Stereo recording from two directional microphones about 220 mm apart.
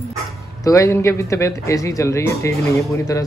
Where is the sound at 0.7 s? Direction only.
15° left (ahead or behind).